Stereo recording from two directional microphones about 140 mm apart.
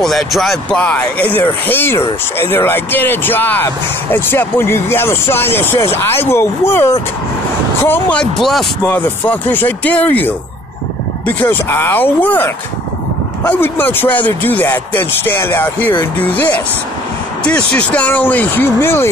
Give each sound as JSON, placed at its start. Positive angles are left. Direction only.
{"t": 0.0, "sound": "speech", "side_deg": 0}
{"t": 8.8, "sound": "speech", "side_deg": 10}